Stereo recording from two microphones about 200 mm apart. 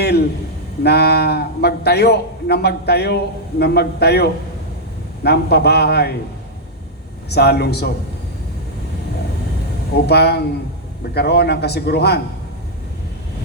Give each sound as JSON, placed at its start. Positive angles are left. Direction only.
{"t": 0.8, "sound": "a man's voice", "side_deg": 55}
{"t": 7.3, "sound": "a man's voice", "side_deg": 55}
{"t": 9.9, "sound": "a man's voice", "side_deg": 55}